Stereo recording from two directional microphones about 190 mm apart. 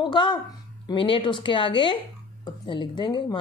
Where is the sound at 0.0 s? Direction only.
25° left (ahead or behind).